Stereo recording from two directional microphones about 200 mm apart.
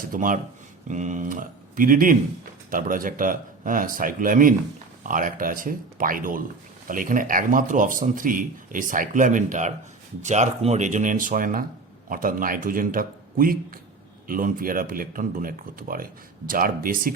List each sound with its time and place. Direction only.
0.0 s speech: 40° right (ahead or behind)